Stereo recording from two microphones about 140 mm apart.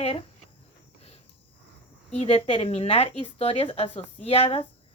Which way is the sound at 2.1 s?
45° left (ahead or behind).